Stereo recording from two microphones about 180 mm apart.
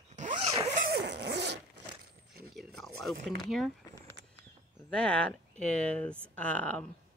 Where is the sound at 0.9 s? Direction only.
65° right (ahead or behind).